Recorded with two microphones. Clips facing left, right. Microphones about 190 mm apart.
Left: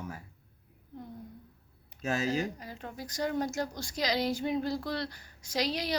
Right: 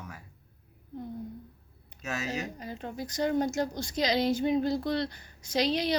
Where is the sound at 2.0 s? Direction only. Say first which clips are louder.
Left 4 dB; 30° left (ahead or behind).